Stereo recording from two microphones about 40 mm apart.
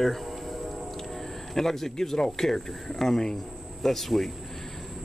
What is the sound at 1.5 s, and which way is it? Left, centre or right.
Speech, centre.